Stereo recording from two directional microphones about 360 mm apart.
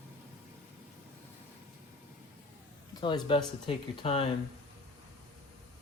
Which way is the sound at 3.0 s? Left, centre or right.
Centre.